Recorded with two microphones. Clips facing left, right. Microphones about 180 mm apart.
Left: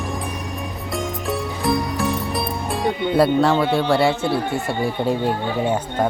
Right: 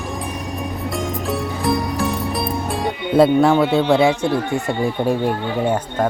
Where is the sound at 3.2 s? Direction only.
25° right (ahead or behind).